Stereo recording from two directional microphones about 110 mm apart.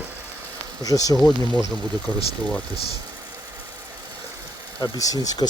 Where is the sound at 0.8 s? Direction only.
30° left (ahead or behind).